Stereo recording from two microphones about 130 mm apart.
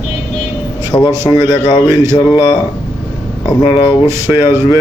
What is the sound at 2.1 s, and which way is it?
Speech, 30° left (ahead or behind).